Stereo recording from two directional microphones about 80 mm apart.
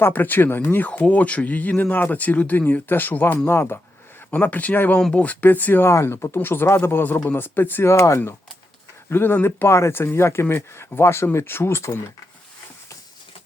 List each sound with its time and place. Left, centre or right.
0.0 s speech: left
4.3 s speech: left
7.9 s speech: left
9.0 s speech: left